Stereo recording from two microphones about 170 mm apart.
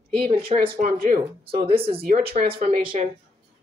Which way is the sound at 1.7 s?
35° right (ahead or behind).